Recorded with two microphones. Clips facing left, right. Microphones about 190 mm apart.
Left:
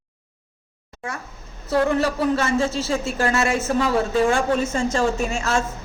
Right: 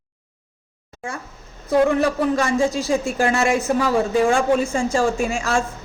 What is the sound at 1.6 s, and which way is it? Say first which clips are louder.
A woman's voice: right 3 dB; 15° right (ahead or behind).